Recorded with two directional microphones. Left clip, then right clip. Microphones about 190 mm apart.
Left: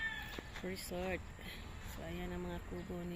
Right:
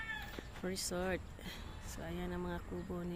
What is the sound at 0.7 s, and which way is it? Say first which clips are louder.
Speech: right 3 dB; 20° right (ahead or behind).